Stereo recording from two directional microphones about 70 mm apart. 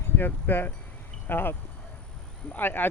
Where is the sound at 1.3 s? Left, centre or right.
Left.